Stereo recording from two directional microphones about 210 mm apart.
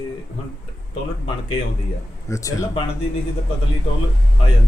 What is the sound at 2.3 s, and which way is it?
Speech, 15° left (ahead or behind).